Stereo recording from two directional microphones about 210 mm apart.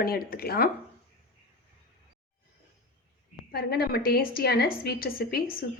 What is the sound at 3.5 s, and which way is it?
Speech, 50° left (ahead or behind).